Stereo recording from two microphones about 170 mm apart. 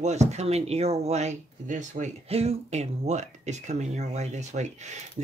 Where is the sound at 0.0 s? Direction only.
40° right (ahead or behind).